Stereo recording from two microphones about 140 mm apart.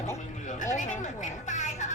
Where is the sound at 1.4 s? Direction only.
60° left (ahead or behind).